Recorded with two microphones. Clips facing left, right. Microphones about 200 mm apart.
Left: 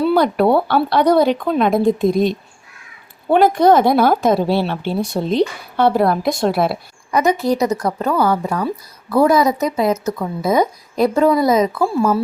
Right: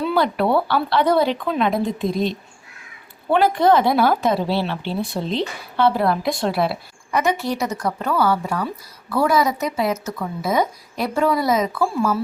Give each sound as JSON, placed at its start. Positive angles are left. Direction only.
{"t": 0.0, "sound": "a woman's voice", "side_deg": 45}